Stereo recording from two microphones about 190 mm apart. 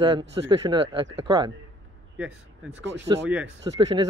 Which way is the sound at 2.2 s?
5° right (ahead or behind).